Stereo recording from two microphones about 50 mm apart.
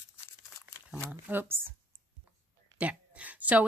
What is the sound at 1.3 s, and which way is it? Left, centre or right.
Speech, right.